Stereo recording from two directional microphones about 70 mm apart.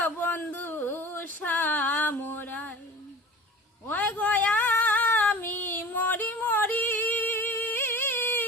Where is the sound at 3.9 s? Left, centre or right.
Left.